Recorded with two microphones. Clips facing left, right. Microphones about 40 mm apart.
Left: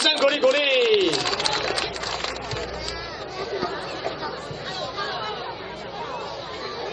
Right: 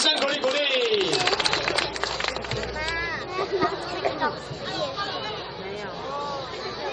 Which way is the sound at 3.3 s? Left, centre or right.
Right.